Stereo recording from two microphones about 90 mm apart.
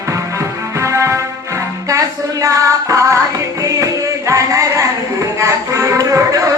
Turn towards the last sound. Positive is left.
turn(degrees=-40)  # may be behind; listen again after turning